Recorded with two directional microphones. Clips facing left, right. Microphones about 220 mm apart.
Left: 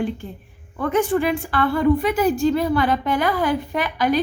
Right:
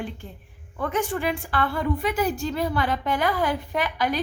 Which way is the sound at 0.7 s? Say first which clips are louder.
Left 7 dB; 75° left (ahead or behind).